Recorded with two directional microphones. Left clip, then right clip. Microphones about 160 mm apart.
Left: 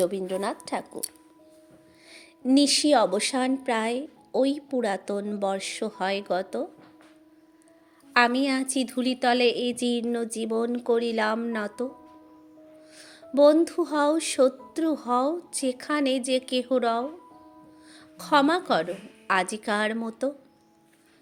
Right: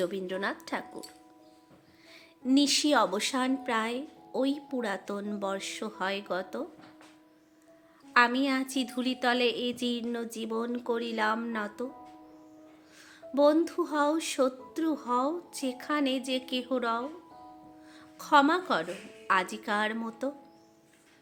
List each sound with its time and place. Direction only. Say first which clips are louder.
0.0 s speech: left 5 dB; 15° left (ahead or behind)
2.5 s speech: left 5 dB; 20° left (ahead or behind)
8.1 s speech: left 3 dB; 25° left (ahead or behind)
13.0 s speech: left 6 dB; 30° left (ahead or behind)